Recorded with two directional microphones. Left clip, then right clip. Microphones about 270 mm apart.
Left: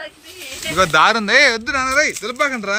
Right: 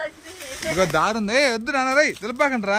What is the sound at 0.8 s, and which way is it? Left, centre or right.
Speech, centre.